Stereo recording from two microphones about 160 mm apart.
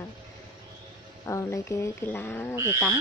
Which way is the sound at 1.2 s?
20° left (ahead or behind).